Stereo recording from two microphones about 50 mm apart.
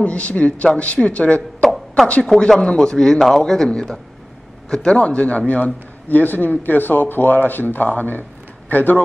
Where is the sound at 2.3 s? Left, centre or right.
Centre.